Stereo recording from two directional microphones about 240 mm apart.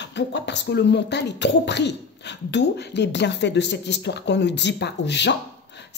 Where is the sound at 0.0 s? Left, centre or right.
Left.